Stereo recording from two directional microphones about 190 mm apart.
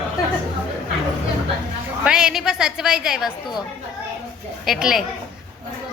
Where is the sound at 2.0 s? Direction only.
5° right (ahead or behind).